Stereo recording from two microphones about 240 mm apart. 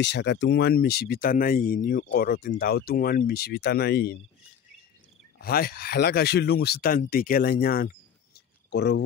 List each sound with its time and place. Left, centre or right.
0.0 s speech: left
5.4 s speech: left